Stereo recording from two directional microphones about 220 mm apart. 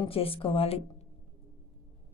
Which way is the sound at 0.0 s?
25° left (ahead or behind).